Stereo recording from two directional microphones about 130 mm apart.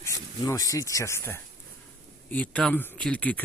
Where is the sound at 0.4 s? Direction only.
25° left (ahead or behind).